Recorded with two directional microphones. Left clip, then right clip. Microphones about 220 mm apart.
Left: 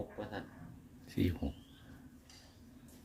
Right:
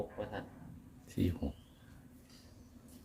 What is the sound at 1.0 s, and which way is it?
Speech, 5° right (ahead or behind).